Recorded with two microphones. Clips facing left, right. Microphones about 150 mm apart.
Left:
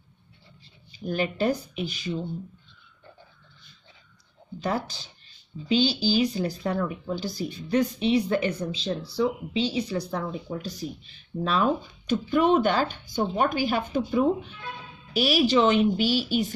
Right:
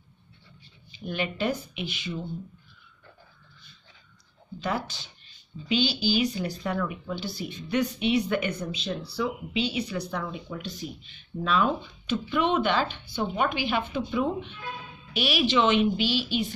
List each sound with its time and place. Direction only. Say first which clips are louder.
0.9 s speech: left 4 dB; 40° left (ahead or behind)
4.6 s speech: left 2 dB; 40° left (ahead or behind)